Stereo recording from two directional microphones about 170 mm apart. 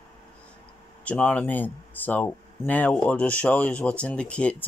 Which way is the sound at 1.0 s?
10° left (ahead or behind).